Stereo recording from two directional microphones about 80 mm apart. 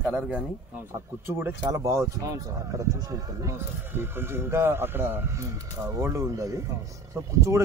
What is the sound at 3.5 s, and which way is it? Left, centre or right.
A man's voice, right.